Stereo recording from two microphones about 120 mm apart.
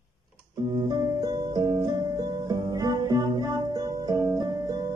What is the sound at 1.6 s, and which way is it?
Music, 30° right (ahead or behind).